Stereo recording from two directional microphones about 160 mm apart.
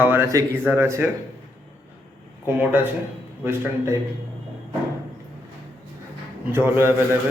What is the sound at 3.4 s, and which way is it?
Speech, 15° right (ahead or behind).